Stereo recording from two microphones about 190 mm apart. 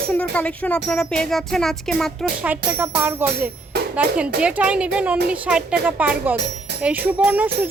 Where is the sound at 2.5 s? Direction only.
10° right (ahead or behind).